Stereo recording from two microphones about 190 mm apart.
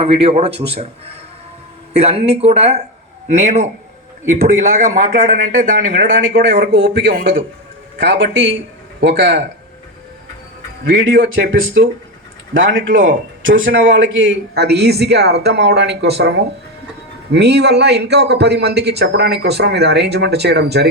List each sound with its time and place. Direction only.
0.0 s a man's voice: 30° right (ahead or behind); by 9.4 s 65° right (ahead or behind)
10.8 s speech: 75° right (ahead or behind)
12.9 s a man's voice: 45° right (ahead or behind)
13.4 s speech: 80° right; by 16.3 s 60° right (ahead or behind)
17.3 s speech: 60° right (ahead or behind)